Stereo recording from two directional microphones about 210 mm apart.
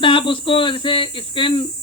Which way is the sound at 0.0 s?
25° left (ahead or behind).